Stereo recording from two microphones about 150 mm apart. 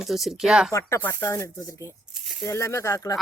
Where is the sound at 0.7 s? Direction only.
20° left (ahead or behind).